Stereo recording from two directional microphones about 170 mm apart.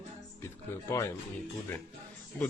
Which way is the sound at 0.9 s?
15° left (ahead or behind).